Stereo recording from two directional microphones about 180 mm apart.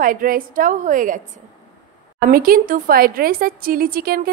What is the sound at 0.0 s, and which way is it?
A woman's voice, 50° right (ahead or behind).